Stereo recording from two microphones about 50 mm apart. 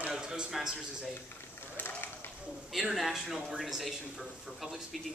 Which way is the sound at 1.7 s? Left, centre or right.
Left.